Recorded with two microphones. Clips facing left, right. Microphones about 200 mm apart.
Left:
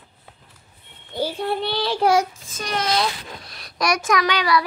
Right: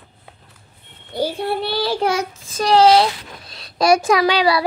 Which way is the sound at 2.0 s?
30° right (ahead or behind).